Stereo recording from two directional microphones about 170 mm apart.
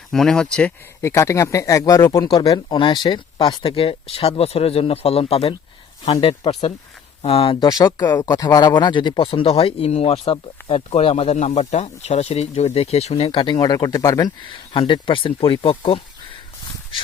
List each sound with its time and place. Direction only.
0.1 s speech: 5° left (ahead or behind); by 16.0 s 30° left (ahead or behind)